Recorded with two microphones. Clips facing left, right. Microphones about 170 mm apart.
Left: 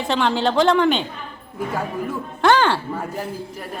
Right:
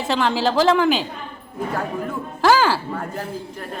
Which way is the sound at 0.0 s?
Centre (ahead or behind).